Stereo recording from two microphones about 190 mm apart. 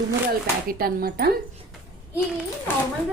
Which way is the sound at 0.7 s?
50° right (ahead or behind).